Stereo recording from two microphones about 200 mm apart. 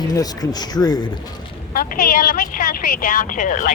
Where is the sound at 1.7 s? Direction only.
45° left (ahead or behind).